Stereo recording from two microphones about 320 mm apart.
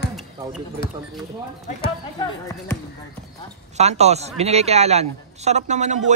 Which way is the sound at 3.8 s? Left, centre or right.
Centre.